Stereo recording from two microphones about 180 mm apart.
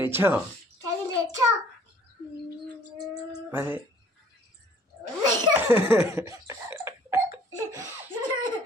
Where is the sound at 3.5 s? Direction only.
10° right (ahead or behind).